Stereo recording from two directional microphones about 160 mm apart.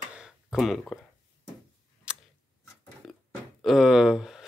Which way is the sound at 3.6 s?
Centre (ahead or behind).